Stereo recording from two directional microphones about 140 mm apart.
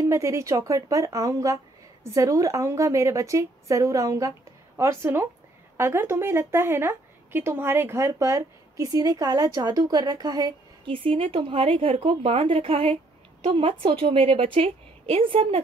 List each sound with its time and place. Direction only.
0.0 s a woman's voice: 20° right (ahead or behind); by 15.6 s 40° right (ahead or behind)